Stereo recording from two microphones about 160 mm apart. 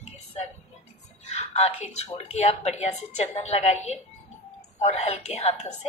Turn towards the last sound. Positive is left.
turn(degrees=45)  # may be behind; listen again after turning